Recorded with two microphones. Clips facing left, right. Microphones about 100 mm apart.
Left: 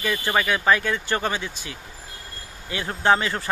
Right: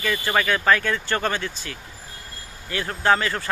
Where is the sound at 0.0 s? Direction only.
15° left (ahead or behind).